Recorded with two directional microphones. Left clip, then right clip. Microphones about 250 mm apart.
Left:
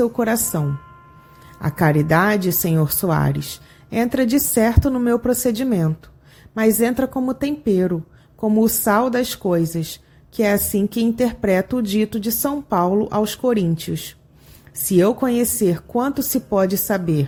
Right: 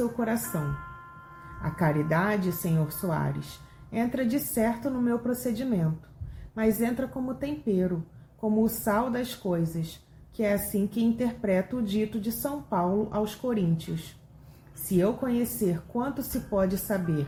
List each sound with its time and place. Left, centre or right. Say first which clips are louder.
0.5 s a woman's voice: left 7 dB; left
14.9 s a woman's voice: left 10 dB; left